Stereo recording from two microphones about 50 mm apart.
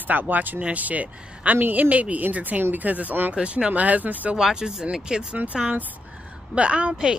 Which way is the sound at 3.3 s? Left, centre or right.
Centre.